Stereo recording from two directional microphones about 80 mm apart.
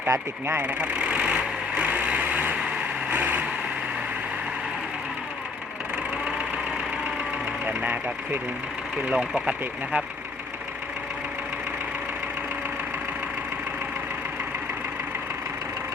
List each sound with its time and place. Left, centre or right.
0.1 s speech: right
0.6 s vehicle: centre
7.7 s speech: centre
9.1 s speech: centre